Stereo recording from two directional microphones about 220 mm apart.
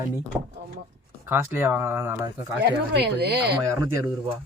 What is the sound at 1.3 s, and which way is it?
Speech, 10° right (ahead or behind).